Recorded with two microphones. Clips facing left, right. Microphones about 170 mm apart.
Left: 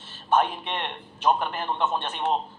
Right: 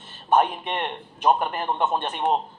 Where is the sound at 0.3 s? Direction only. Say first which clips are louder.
Right 3 dB; 45° right (ahead or behind).